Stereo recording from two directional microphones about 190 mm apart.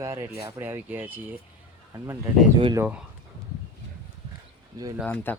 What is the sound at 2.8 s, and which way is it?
Speech, 10° right (ahead or behind).